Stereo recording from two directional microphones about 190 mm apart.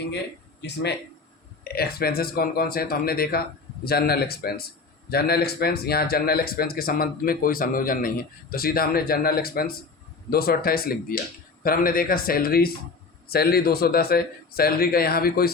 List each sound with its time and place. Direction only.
0.6 s speech: 60° left (ahead or behind)